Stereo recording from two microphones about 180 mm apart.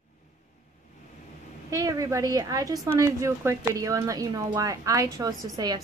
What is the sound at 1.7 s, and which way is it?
A woman's voice, 20° right (ahead or behind).